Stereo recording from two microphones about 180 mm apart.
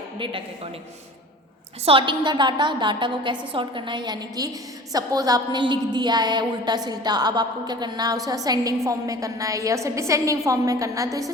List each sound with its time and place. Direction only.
0.2 s a woman's voice: 30° right (ahead or behind)
1.8 s a woman's voice: 30° right (ahead or behind)